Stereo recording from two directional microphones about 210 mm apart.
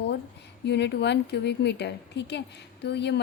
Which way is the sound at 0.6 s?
55° left (ahead or behind).